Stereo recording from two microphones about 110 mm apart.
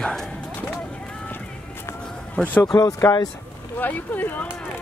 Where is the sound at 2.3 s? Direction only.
15° left (ahead or behind).